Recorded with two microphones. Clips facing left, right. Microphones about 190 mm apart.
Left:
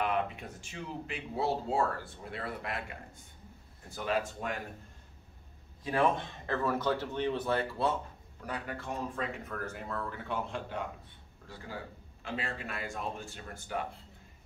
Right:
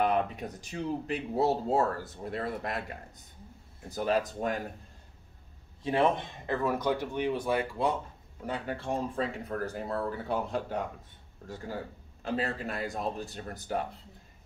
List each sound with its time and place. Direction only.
0.0 s speech: 40° right (ahead or behind)
3.9 s speech: 40° right (ahead or behind)
5.9 s speech: 20° right (ahead or behind)
8.4 s speech: 25° right (ahead or behind)